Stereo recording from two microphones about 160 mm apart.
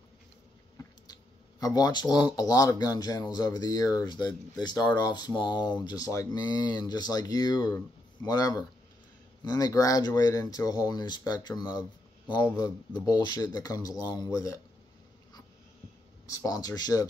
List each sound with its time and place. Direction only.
1.6 s speech: 25° left (ahead or behind)
16.3 s speech: 20° left (ahead or behind)